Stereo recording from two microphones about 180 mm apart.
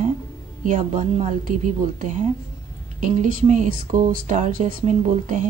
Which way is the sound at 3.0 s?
45° right (ahead or behind).